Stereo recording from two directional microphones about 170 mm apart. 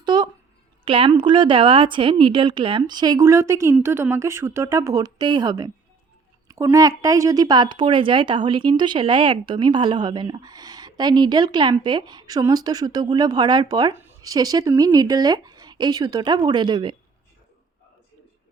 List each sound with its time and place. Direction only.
0.0 s a sound: 25° right (ahead or behind)
0.9 s speech: 30° right (ahead or behind)
13.9 s speech: 15° right (ahead or behind)